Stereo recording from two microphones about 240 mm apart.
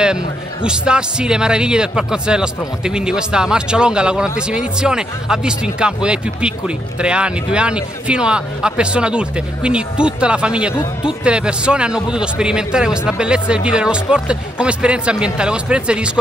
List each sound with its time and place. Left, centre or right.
0.7 s a man's voice: centre
10.7 s speech: centre
11.2 s a man's voice: centre